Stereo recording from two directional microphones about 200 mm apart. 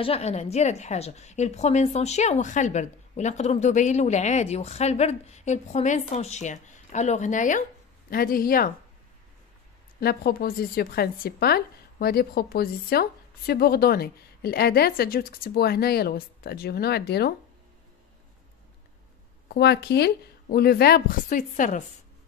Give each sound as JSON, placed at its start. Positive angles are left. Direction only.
{"t": 0.0, "sound": "a woman's voice", "side_deg": 30}
{"t": 9.9, "sound": "speech", "side_deg": 50}
{"t": 19.5, "sound": "speech", "side_deg": 55}